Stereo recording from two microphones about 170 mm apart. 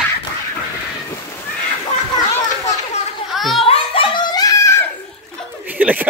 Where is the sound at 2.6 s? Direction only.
40° left (ahead or behind).